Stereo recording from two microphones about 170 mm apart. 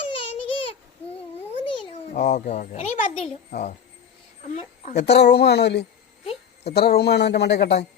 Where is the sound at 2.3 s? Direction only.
45° left (ahead or behind).